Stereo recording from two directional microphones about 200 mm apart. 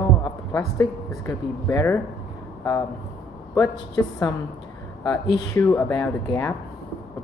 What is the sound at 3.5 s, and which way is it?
Speech, 15° left (ahead or behind).